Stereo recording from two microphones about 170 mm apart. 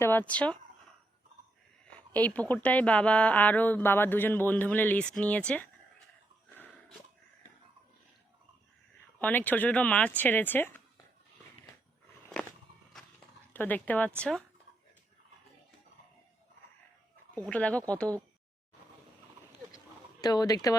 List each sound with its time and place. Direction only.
0.0 s a woman's voice: 10° left (ahead or behind)
1.9 s a woman's voice: 10° left (ahead or behind)
9.1 s a woman's voice: 10° left (ahead or behind)
13.5 s speech: 10° left (ahead or behind)
17.3 s a woman's voice: 5° left (ahead or behind)
20.2 s speech: 20° left (ahead or behind)